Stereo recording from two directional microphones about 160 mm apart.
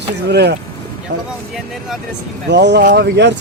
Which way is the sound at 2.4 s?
90° right.